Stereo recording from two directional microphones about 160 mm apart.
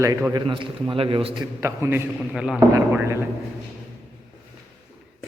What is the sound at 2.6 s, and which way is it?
Speech, 15° right (ahead or behind).